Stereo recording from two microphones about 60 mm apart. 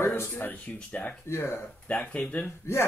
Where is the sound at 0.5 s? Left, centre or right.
Left.